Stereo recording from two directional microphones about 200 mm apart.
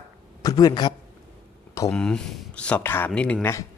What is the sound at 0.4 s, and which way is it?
Speech, 20° left (ahead or behind).